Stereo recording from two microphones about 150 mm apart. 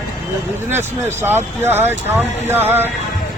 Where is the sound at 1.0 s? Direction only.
15° right (ahead or behind).